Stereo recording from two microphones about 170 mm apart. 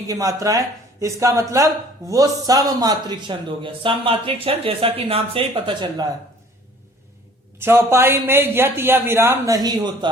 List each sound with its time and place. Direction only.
0.1 s speech: 20° right (ahead or behind)
7.6 s a man's voice: 15° right (ahead or behind)